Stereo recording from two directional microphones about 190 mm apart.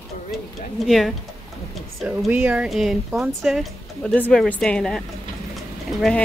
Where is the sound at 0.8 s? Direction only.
Centre (ahead or behind).